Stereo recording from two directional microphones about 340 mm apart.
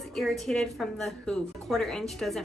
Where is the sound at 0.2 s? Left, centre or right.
Centre.